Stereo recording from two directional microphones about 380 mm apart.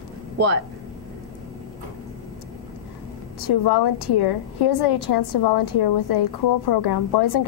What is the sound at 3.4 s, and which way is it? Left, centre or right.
A woman's voice, left.